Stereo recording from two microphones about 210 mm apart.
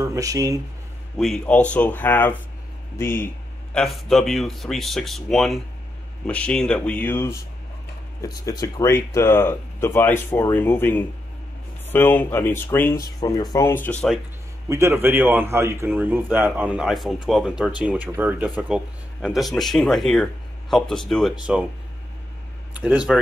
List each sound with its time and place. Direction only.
0.0 s speech: 15° right (ahead or behind)
1.1 s speech: centre (ahead or behind)
14.7 s speech: 15° right (ahead or behind)
22.8 s speech: 5° right (ahead or behind)